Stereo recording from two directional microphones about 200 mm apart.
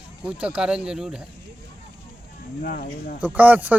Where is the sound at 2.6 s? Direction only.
45° left (ahead or behind).